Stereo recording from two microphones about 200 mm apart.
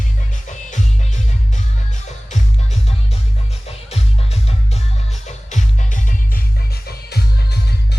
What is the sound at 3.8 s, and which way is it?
Music, 30° left (ahead or behind).